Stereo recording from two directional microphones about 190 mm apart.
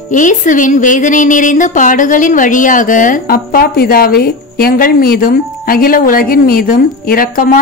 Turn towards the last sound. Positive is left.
turn(degrees=50)  # may be behind; listen again after turning